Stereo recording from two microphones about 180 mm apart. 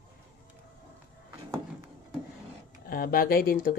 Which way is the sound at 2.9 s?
55° left (ahead or behind).